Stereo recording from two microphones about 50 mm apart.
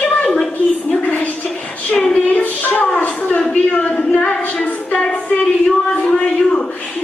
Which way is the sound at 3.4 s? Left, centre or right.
Centre.